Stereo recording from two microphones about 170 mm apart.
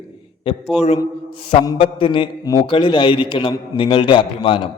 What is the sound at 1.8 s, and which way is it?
A man's voice, 30° left (ahead or behind).